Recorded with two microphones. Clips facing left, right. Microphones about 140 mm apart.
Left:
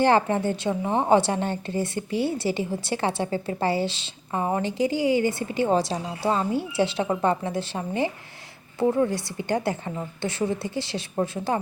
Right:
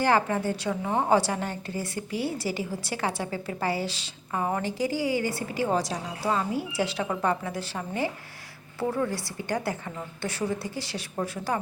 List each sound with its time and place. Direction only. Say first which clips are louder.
0.0 s a woman's voice: left 4 dB; 25° left (ahead or behind)